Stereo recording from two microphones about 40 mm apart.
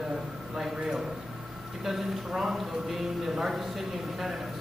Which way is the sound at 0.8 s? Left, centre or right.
Centre.